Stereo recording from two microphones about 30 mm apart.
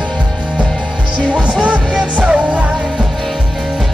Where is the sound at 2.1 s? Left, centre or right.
Right.